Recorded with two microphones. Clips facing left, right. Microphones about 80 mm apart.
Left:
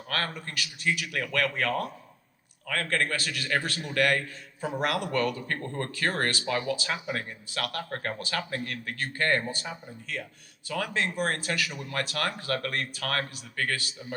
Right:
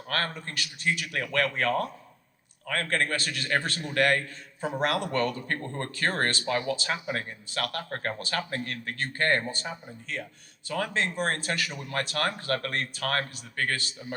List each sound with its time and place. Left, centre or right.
0.1 s speech: right